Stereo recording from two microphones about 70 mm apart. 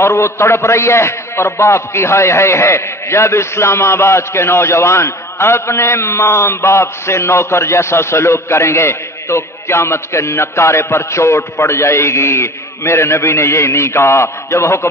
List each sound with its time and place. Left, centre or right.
0.0 s a man's voice: left